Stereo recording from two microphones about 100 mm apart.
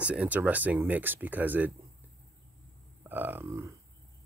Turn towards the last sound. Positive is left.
turn(degrees=-30)  # may be behind; listen again after turning